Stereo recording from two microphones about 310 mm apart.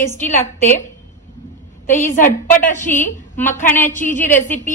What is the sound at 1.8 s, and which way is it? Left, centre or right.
A woman's voice, left.